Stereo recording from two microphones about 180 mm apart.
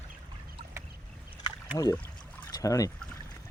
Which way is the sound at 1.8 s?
20° left (ahead or behind).